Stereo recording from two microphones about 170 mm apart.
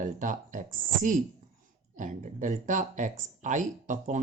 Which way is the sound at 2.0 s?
50° right (ahead or behind).